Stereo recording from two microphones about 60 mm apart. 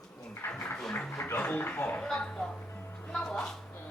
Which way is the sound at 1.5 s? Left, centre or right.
Left.